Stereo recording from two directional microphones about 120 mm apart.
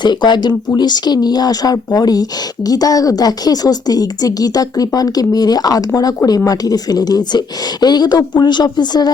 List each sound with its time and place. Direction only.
0.0 s a woman's voice: 40° left (ahead or behind)